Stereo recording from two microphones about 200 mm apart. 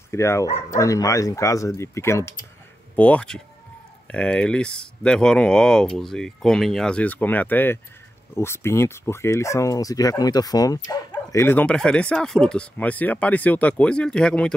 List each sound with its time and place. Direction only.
0.1 s speech: 15° left (ahead or behind)